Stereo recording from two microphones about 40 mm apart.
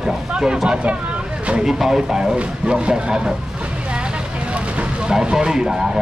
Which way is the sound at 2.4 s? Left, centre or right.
Right.